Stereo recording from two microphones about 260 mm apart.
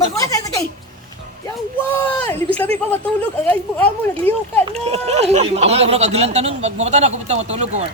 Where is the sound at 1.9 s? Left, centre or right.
Centre.